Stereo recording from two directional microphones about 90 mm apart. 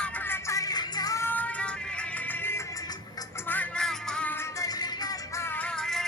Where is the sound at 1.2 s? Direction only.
20° left (ahead or behind).